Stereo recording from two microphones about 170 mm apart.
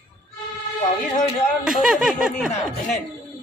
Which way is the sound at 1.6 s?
5° right (ahead or behind).